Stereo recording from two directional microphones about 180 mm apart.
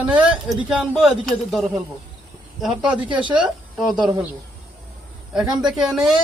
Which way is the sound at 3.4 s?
5° right (ahead or behind).